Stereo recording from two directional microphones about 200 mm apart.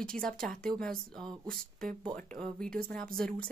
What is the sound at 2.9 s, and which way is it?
Speech, 5° left (ahead or behind).